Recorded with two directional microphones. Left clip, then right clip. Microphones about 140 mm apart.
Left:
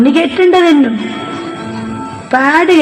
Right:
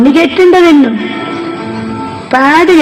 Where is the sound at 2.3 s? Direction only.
30° right (ahead or behind).